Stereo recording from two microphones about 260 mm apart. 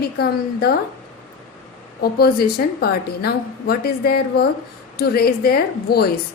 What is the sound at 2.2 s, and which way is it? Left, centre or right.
A woman's voice, left.